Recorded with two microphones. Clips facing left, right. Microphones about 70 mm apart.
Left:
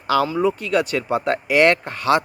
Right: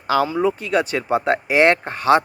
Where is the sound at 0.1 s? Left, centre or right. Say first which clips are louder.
Even; right.